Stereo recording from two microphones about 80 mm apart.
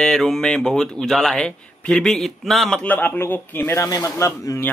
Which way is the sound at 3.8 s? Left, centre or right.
Left.